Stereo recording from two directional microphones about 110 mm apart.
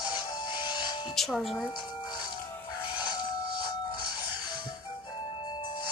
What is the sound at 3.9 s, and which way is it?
Music, 40° left (ahead or behind).